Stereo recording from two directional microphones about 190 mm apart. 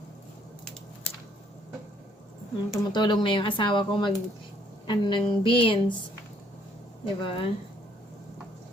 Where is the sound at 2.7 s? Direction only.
25° left (ahead or behind).